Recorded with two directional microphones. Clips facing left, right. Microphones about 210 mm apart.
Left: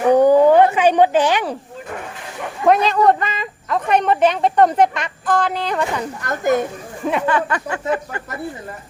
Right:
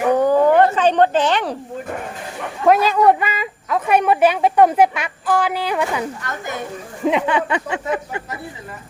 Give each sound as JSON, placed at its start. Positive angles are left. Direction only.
{"t": 0.1, "sound": "a sound", "side_deg": 15}
{"t": 2.6, "sound": "a woman's voice", "side_deg": -5}
{"t": 6.2, "sound": "speech", "side_deg": 45}
{"t": 7.0, "sound": "a woman's voice", "side_deg": -15}